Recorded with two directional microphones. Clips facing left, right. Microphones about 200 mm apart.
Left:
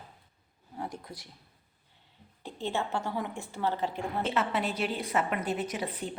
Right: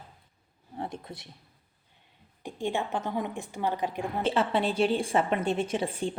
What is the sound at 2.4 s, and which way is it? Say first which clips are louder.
A woman's voice: right 2 dB; 15° right (ahead or behind).